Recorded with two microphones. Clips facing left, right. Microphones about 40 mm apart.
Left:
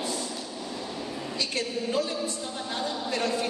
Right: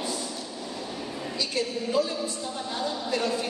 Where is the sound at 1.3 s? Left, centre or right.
Left.